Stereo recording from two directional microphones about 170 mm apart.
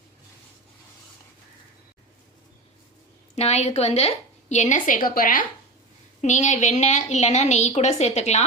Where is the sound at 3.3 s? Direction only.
40° left (ahead or behind).